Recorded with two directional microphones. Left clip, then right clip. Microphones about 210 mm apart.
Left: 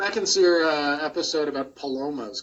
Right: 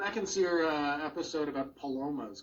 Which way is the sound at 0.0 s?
60° left (ahead or behind).